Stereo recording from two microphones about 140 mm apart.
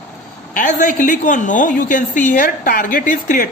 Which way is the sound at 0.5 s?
65° left (ahead or behind).